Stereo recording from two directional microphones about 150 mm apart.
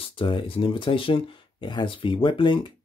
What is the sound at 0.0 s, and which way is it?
Speech, 35° left (ahead or behind).